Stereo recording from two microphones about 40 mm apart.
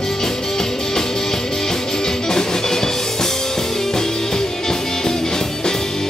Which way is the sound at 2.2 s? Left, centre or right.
Centre.